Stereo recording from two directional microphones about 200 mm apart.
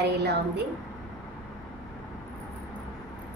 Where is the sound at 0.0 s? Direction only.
55° right (ahead or behind).